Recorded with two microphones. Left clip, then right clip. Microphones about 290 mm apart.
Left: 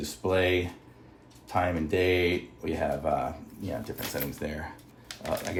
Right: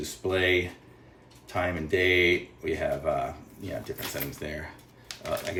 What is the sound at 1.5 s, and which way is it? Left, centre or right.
Speech, centre.